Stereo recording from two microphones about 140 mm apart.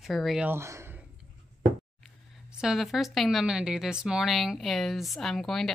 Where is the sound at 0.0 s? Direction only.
Centre (ahead or behind).